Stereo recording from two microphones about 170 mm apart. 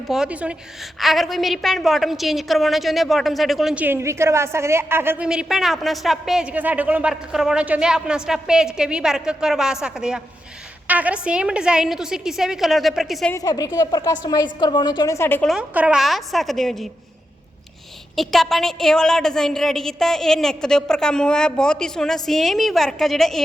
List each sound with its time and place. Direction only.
0.1 s a woman's voice: 5° right (ahead or behind)
13.3 s a woman's voice: 20° left (ahead or behind)
15.4 s a woman's voice: 5° right (ahead or behind)
18.2 s a woman's voice: centre (ahead or behind)